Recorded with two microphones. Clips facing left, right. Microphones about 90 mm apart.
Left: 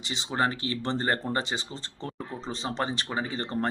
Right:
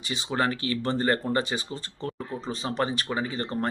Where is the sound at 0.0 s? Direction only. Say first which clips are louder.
Right 1 dB; 25° left (ahead or behind).